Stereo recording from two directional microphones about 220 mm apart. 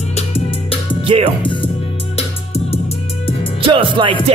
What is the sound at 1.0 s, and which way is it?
Music, 25° right (ahead or behind).